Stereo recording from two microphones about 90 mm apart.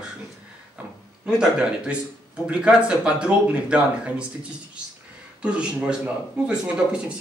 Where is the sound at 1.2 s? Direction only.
10° right (ahead or behind).